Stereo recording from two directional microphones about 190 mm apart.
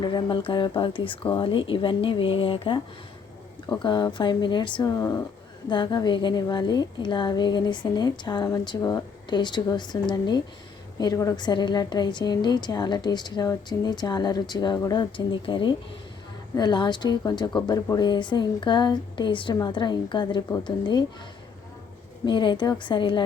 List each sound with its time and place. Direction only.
0.0 s a woman's voice: 25° left (ahead or behind)
3.8 s a woman's voice: 25° left (ahead or behind)
22.3 s a woman's voice: 25° left (ahead or behind)